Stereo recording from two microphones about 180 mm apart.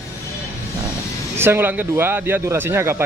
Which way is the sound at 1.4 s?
10° right (ahead or behind).